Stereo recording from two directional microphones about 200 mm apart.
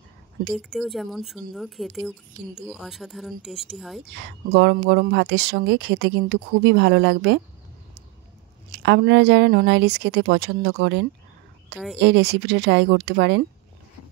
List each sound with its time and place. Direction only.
0.5 s speech: centre (ahead or behind)
4.2 s speech: 60° right (ahead or behind)
8.7 s speech: 60° right (ahead or behind)